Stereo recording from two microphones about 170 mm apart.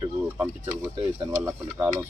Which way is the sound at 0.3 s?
10° right (ahead or behind).